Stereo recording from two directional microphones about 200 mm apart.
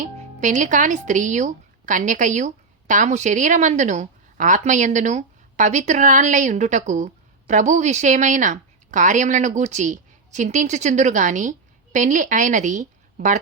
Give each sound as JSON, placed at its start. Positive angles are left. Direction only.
{"t": 0.3, "sound": "a woman's voice", "side_deg": -40}